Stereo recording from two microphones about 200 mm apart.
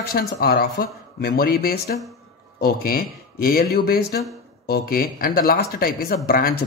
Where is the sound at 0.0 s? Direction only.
50° left (ahead or behind).